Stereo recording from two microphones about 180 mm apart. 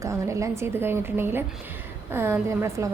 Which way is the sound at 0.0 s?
15° right (ahead or behind).